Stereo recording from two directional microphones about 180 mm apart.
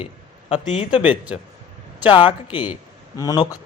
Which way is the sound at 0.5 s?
35° left (ahead or behind).